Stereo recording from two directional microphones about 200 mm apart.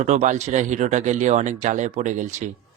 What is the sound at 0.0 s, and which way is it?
Speech, 35° right (ahead or behind).